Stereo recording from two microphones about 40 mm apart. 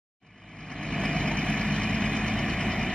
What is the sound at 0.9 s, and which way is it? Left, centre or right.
Vehicle, left.